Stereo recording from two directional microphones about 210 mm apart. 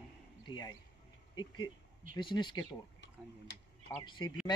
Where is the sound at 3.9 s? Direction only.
20° left (ahead or behind).